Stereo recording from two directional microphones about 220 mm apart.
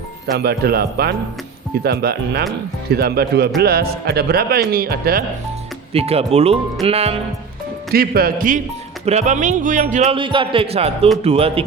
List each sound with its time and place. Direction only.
0.3 s a man's voice: 45° right (ahead or behind)
5.9 s speech: 25° right (ahead or behind)
7.9 s speech: 45° right (ahead or behind); by 11.6 s 25° right (ahead or behind)